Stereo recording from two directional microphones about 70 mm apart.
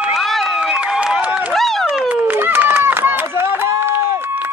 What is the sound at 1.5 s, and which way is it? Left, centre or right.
Run, centre.